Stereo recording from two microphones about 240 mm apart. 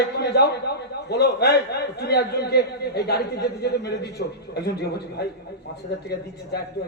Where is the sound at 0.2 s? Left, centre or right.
Left.